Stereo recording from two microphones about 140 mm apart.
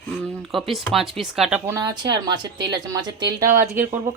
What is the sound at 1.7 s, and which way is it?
Speech, 25° right (ahead or behind).